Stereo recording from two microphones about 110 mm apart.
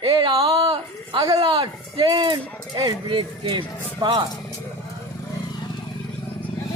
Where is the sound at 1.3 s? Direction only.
60° right (ahead or behind).